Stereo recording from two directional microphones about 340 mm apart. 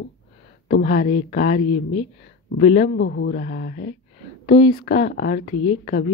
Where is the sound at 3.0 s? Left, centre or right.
Left.